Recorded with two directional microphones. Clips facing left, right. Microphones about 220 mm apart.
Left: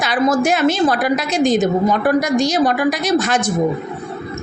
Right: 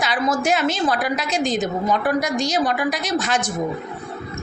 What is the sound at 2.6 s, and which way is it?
Speech, 60° left (ahead or behind).